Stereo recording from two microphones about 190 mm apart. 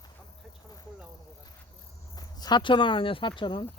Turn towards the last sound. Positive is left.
turn(degrees=25)  # may be behind; listen again after turning